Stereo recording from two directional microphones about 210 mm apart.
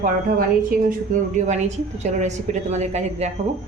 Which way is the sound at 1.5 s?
35° right (ahead or behind).